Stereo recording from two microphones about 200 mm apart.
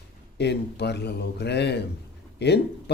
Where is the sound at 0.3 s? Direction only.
55° left (ahead or behind).